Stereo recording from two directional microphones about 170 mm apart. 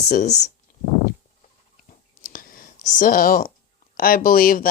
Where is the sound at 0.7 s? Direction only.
50° left (ahead or behind).